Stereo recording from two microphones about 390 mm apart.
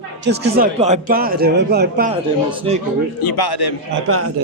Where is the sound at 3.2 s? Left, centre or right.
Left.